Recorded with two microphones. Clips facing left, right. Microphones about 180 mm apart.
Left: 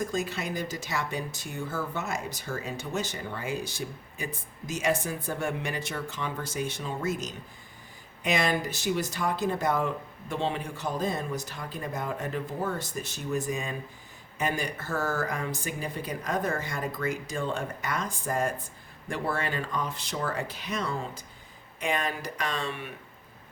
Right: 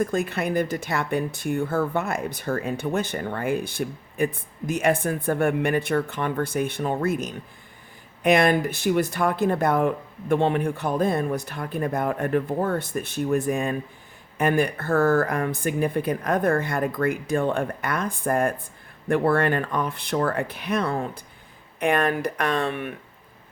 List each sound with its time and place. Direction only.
0.0 s speech: 55° right (ahead or behind)